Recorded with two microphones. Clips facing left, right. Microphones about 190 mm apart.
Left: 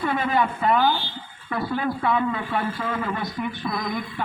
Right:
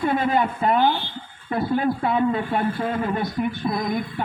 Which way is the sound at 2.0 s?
25° right (ahead or behind).